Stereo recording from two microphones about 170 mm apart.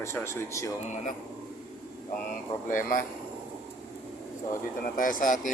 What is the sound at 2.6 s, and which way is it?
Speech, 50° left (ahead or behind).